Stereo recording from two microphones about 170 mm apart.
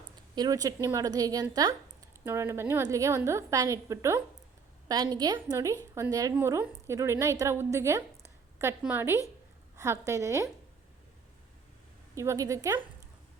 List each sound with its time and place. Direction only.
0.3 s a woman's voice: 20° right (ahead or behind)
12.1 s a woman's voice: 15° right (ahead or behind)